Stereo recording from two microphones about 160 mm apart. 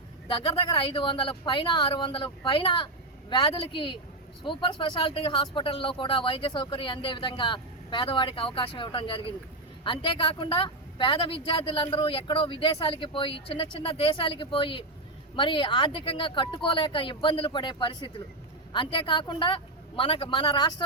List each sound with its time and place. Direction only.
0.3 s speech: 35° left (ahead or behind)